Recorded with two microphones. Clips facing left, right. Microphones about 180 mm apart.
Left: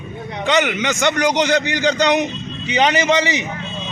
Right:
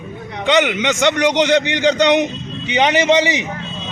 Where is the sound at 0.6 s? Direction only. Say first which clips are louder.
Right 2 dB; 20° right (ahead or behind).